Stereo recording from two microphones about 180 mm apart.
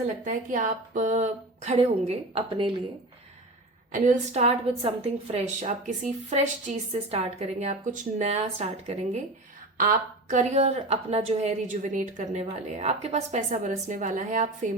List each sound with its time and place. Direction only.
0.3 s a woman's voice: 45° right (ahead or behind)
3.9 s a woman's voice: 45° right (ahead or behind)